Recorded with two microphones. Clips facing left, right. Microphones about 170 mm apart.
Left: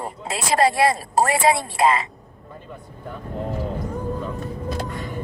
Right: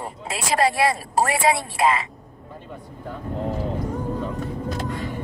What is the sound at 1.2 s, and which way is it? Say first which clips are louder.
Speech: left 2 dB; 35° left (ahead or behind).